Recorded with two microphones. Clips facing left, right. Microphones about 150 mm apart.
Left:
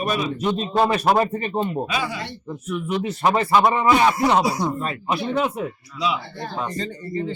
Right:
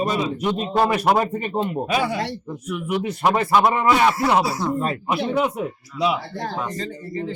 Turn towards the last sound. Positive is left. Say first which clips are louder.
# left 1 dB
turn(degrees=0)  # may be behind; listen again after turning